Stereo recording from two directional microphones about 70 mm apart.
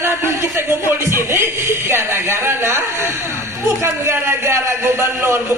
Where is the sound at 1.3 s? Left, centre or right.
Right.